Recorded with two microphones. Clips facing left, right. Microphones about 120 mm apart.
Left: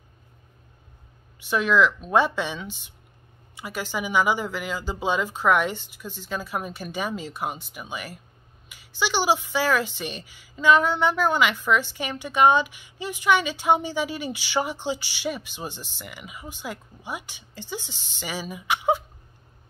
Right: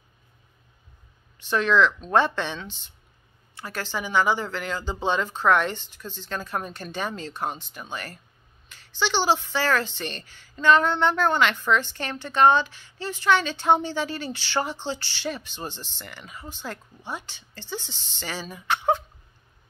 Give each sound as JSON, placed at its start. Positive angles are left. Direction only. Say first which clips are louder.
{"t": 1.4, "sound": "speech", "louder": "even", "side_deg": 10}